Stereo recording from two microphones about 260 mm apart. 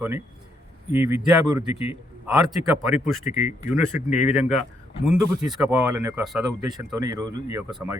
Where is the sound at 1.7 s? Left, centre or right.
Left.